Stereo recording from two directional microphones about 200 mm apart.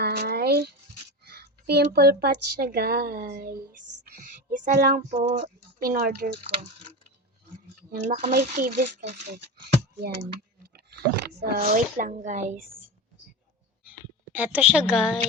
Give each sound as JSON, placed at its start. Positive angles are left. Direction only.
{"t": 0.0, "sound": "a sound", "side_deg": -55}
{"t": 1.2, "sound": "speech", "side_deg": -50}
{"t": 7.9, "sound": "speech", "side_deg": -35}
{"t": 8.3, "sound": "speech", "side_deg": -50}
{"t": 10.0, "sound": "speech", "side_deg": -50}
{"t": 14.3, "sound": "a woman's voice", "side_deg": -10}